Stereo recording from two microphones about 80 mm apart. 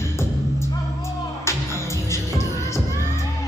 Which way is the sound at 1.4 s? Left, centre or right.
Left.